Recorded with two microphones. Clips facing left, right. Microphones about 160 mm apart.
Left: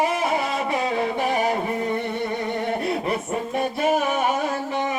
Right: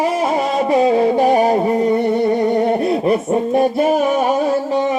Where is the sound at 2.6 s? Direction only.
40° right (ahead or behind).